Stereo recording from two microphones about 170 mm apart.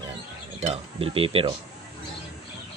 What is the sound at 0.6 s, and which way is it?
Speech, 35° right (ahead or behind).